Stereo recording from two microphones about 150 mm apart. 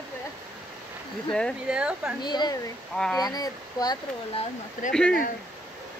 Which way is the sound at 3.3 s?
25° left (ahead or behind).